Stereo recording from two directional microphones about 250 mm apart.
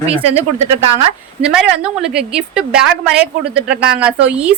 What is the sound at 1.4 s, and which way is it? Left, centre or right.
A woman's voice, centre.